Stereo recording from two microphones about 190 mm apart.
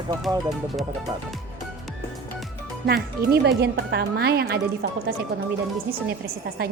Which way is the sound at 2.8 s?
55° right (ahead or behind).